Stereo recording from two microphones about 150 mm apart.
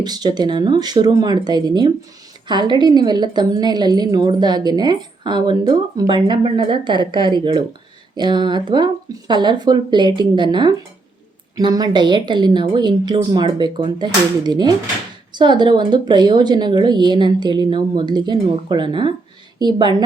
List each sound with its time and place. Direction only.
0.0 s a woman's voice: 25° right (ahead or behind)